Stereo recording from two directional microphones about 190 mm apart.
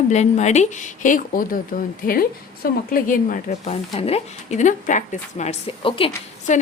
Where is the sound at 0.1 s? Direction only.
35° left (ahead or behind).